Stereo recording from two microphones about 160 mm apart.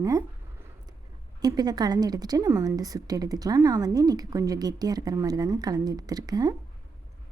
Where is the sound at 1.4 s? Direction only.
25° right (ahead or behind).